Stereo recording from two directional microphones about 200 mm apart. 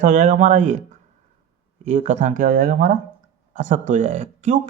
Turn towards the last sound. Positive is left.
turn(degrees=-35)  # may be behind; listen again after turning